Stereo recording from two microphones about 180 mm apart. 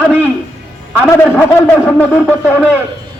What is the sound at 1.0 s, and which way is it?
A man's voice, 15° left (ahead or behind).